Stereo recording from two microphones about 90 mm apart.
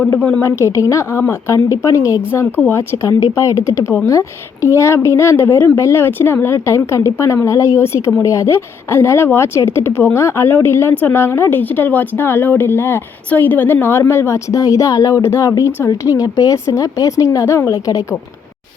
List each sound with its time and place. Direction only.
0.2 s a woman's voice: 10° left (ahead or behind)
0.4 s speech: 30° left (ahead or behind)